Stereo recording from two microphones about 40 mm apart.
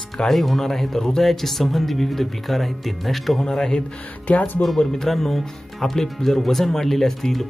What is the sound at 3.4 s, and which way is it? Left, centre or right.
Speech, centre.